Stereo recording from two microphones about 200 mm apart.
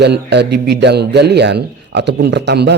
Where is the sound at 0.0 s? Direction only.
55° right (ahead or behind).